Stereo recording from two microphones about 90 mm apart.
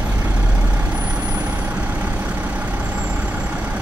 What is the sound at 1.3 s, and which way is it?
Vehicle, 15° right (ahead or behind).